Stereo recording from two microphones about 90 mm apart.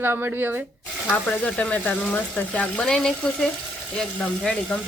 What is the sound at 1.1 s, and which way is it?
Speech, 15° left (ahead or behind).